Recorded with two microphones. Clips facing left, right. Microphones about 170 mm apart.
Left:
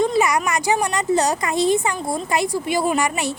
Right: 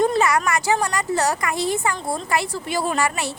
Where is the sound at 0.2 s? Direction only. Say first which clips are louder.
Left 1 dB; 15° left (ahead or behind).